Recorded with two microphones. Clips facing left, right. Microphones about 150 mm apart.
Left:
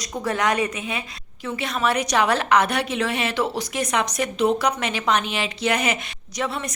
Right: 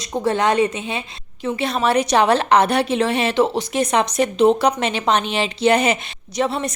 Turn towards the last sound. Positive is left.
turn(degrees=-30)  # may be behind; listen again after turning